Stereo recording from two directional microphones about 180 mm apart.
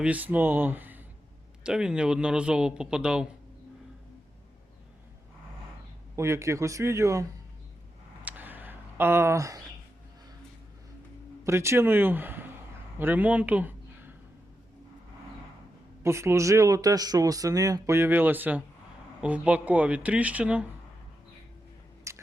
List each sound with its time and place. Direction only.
0.0 s speech: 10° right (ahead or behind)
6.1 s speech: 15° right (ahead or behind)
8.2 s a sound: 10° right (ahead or behind)
11.4 s speech: 15° right (ahead or behind)
16.0 s speech: 15° right (ahead or behind)
22.1 s biting: 15° right (ahead or behind)